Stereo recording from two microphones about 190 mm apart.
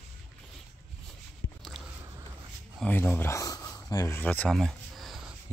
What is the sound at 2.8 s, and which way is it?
Speech, 10° left (ahead or behind).